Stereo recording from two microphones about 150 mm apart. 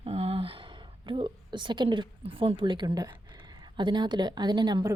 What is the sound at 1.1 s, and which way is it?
A woman's voice, 30° right (ahead or behind).